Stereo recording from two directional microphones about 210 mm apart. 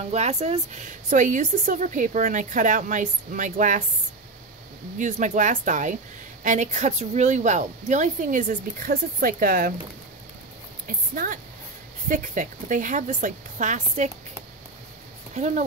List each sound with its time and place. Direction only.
0.0 s speech: 30° right (ahead or behind)
4.9 s speech: 35° right (ahead or behind)
10.9 s speech: 40° right (ahead or behind)
15.3 s speech: 35° right (ahead or behind)